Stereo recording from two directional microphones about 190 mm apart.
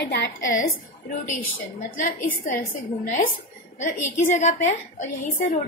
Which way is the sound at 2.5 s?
45° left (ahead or behind).